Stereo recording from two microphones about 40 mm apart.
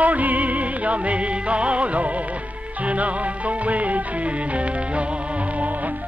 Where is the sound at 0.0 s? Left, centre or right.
Right.